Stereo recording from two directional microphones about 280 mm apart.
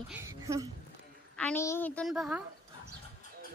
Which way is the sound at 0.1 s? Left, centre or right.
Centre.